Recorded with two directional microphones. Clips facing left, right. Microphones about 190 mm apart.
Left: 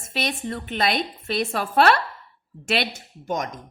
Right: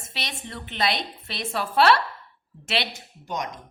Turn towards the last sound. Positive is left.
turn(degrees=50)  # may be behind; listen again after turning